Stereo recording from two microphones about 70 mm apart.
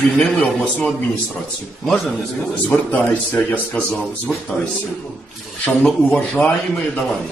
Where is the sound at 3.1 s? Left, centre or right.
Left.